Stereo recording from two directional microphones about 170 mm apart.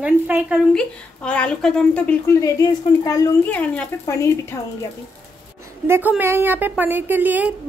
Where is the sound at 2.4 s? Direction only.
20° left (ahead or behind).